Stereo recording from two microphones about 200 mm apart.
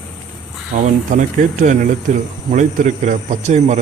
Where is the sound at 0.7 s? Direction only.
40° right (ahead or behind).